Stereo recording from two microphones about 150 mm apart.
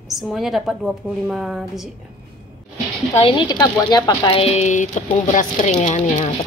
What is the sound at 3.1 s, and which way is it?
Speech, 35° left (ahead or behind).